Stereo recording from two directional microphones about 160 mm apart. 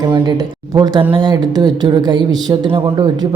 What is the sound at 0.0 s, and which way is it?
Speech, 25° right (ahead or behind).